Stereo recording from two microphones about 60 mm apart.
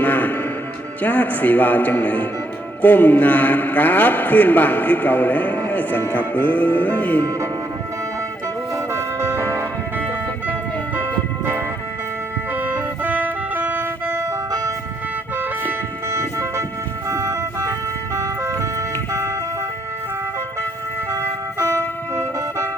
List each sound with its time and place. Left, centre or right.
0.0 s music: left
1.0 s a man's voice: left
8.7 s music: right
12.5 s music: right
14.3 s ice cream truck: right
16.0 s music: right
17.1 s ice cream truck: right
21.1 s music: right